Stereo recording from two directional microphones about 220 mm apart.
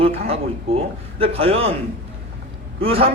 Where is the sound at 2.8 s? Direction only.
25° right (ahead or behind).